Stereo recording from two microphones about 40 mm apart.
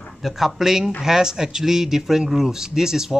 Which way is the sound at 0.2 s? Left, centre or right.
Centre.